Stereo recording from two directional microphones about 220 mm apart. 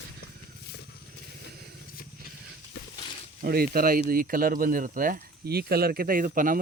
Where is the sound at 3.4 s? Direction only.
45° right (ahead or behind).